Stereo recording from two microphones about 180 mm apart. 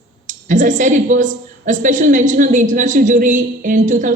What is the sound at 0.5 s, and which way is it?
A woman's voice, 45° right (ahead or behind).